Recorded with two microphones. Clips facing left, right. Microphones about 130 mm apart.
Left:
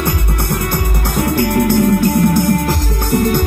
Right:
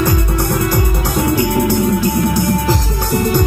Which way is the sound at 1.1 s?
60° left (ahead or behind).